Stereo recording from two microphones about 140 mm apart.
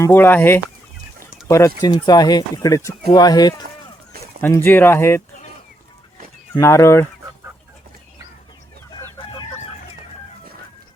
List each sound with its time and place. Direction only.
0.0 s speech: 15° left (ahead or behind)
4.4 s speech: 15° left (ahead or behind)
6.5 s speech: 20° left (ahead or behind)
8.9 s chicken: 30° left (ahead or behind)